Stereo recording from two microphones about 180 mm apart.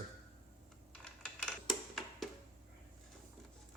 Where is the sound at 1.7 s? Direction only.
Centre (ahead or behind).